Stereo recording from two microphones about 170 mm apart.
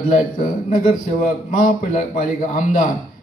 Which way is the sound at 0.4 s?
55° left (ahead or behind).